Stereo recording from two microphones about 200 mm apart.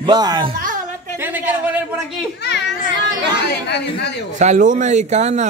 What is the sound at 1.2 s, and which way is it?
Speech, 10° right (ahead or behind).